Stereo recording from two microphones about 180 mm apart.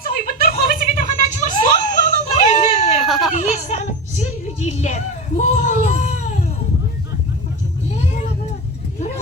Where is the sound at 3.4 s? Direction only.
40° left (ahead or behind).